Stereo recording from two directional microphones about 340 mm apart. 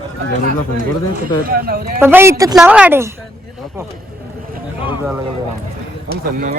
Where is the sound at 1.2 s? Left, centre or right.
Right.